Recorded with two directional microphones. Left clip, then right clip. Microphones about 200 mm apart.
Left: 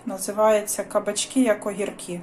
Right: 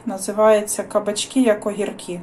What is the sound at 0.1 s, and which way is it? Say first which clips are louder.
Speech: right 4 dB; 5° left (ahead or behind).